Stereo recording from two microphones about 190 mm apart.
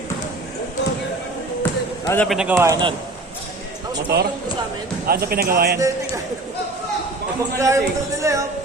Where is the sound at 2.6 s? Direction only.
15° right (ahead or behind).